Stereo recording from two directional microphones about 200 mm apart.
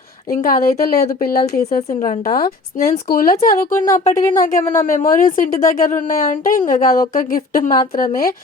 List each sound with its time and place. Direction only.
0.3 s speech: 45° left (ahead or behind)
3.7 s speech: 10° left (ahead or behind)
3.9 s speech: 40° left (ahead or behind)
4.6 s speech: 15° left (ahead or behind)
4.9 s speech: 40° left (ahead or behind)